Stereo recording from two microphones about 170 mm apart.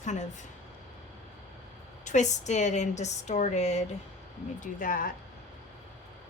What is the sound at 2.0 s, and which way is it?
Speech, 45° left (ahead or behind).